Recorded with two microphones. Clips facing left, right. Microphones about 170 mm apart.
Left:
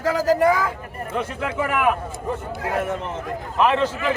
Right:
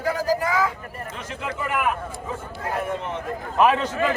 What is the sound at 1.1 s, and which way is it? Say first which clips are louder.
Speech: left 8 dB; 65° left (ahead or behind).